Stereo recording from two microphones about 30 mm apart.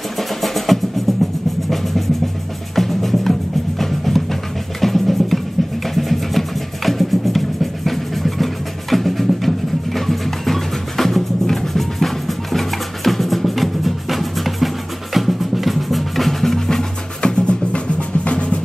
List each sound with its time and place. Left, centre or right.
0.2 s music: centre
17.2 s music: left